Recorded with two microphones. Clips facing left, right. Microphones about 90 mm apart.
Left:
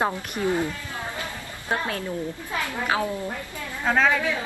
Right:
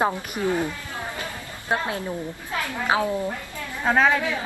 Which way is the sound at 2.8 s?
20° right (ahead or behind).